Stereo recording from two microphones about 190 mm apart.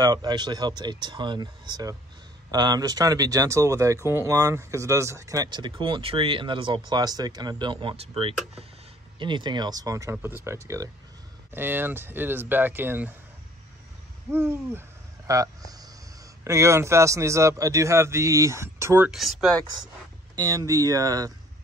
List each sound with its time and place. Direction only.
0.0 s a man's voice: 20° right (ahead or behind)
14.3 s a man's voice: 10° right (ahead or behind)
19.0 s speech: centre (ahead or behind)
20.3 s a man's voice: 15° right (ahead or behind)